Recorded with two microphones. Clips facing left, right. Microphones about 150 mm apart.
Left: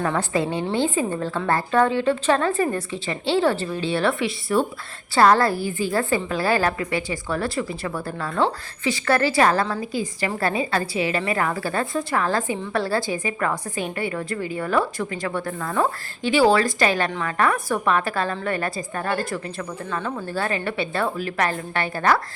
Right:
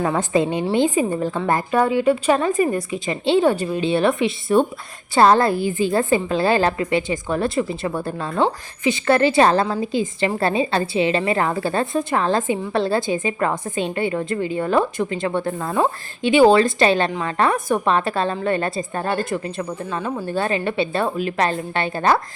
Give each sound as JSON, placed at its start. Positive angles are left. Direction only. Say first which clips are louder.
{"t": 0.1, "sound": "a woman's voice", "louder": "right 4 dB", "side_deg": -20}